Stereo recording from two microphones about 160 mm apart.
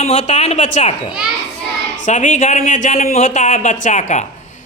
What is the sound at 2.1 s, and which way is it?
Speech, 50° left (ahead or behind).